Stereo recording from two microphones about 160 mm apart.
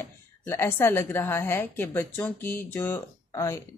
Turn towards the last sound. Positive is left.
turn(degrees=20)  # may be behind; listen again after turning